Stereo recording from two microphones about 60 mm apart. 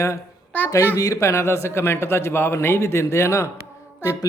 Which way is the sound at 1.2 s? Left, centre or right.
Left.